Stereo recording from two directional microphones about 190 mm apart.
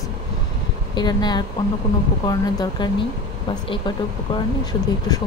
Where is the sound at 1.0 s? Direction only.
20° left (ahead or behind).